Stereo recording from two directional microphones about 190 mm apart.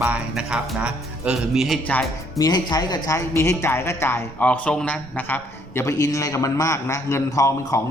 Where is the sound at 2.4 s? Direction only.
20° left (ahead or behind).